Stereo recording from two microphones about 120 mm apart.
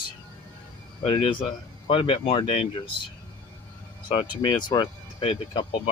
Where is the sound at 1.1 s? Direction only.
45° left (ahead or behind).